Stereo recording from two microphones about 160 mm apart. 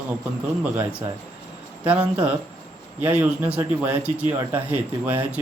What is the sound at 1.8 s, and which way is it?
Speech, 10° right (ahead or behind).